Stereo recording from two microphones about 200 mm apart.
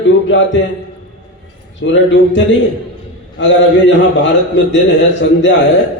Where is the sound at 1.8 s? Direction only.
65° left (ahead or behind).